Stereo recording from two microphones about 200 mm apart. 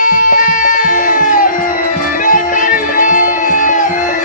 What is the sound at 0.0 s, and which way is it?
Music, 40° left (ahead or behind).